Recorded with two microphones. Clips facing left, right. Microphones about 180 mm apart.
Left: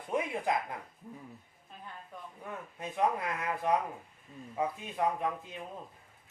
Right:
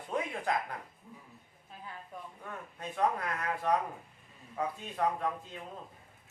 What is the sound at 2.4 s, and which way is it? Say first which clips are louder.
A man's voice: left 3 dB; 15° left (ahead or behind).